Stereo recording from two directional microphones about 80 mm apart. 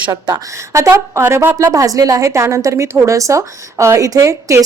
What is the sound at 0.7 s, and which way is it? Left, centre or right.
Speech, right.